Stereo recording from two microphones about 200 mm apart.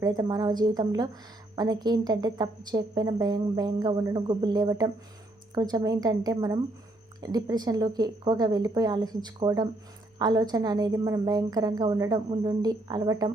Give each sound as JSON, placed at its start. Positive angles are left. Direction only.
{"t": 0.0, "sound": "a woman's voice", "side_deg": -20}